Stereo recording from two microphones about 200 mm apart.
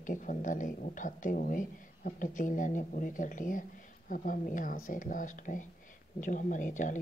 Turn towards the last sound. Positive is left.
turn(degrees=40)  # may be behind; listen again after turning